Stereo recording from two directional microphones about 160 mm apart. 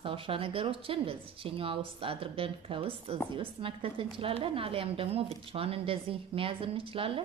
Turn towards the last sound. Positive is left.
turn(degrees=-35)  # may be behind; listen again after turning